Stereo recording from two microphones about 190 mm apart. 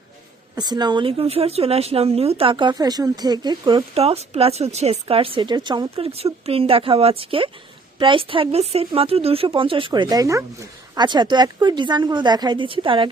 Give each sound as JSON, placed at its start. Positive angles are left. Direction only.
{"t": 0.5, "sound": "speech", "side_deg": -20}
{"t": 3.9, "sound": "speech", "side_deg": -30}